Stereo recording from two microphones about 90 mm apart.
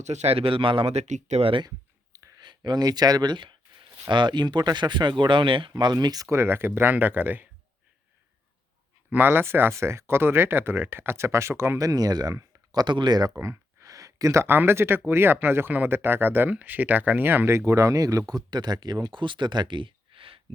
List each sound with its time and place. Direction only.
0.3 s speech: 85° right
1.4 s speech: 90° right
2.4 s a sound: 55° right (ahead or behind)
4.1 s speech: 60° right (ahead or behind)
5.7 s speech: 50° right (ahead or behind)
6.3 s speech: 30° right (ahead or behind)
9.0 s speech: 25° right (ahead or behind); by 12.8 s 40° right (ahead or behind)
12.8 s speech: 55° right (ahead or behind)
13.4 s a sound: 35° right (ahead or behind)
14.4 s speech: 25° right (ahead or behind)
17.7 s speech: 40° right (ahead or behind); by 20.4 s 85° right